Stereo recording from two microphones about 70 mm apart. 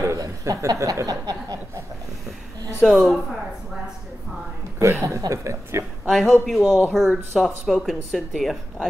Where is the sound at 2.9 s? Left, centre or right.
Centre.